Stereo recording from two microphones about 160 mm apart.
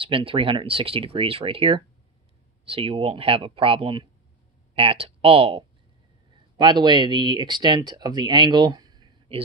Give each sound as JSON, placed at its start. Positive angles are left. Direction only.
{"t": 0.0, "sound": "speech", "side_deg": -35}